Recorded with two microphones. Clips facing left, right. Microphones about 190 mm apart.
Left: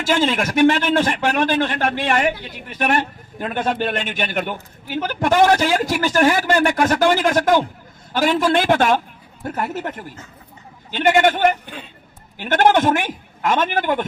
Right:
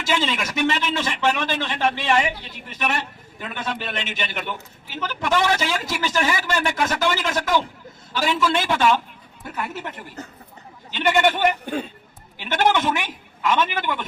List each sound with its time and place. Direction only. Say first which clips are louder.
0.0 s a man's voice: left 5 dB; 50° left (ahead or behind)
10.9 s a man's voice: left 4 dB; 50° left (ahead or behind)
11.6 s a man's voice: right 9 dB; 45° right (ahead or behind)
12.4 s a man's voice: left 5 dB; 50° left (ahead or behind)